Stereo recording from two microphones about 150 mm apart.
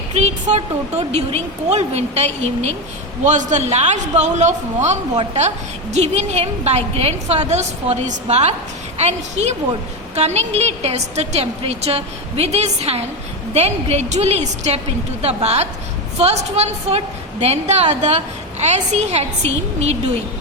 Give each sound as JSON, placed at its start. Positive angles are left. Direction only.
{"t": 0.1, "sound": "a woman's voice", "side_deg": -50}